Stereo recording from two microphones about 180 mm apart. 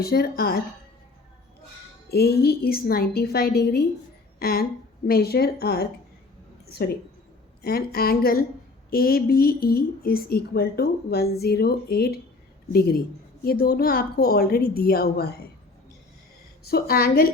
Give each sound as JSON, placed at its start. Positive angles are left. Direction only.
{"t": 0.0, "sound": "a woman's voice", "side_deg": 60}
{"t": 2.0, "sound": "a woman's voice", "side_deg": 60}
{"t": 16.6, "sound": "a woman's voice", "side_deg": 55}